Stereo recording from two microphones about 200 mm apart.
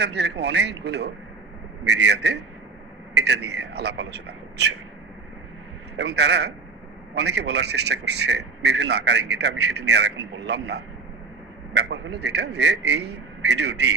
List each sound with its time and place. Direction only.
0.0 s a man's voice: 60° right (ahead or behind)
6.0 s a man's voice: 60° right (ahead or behind)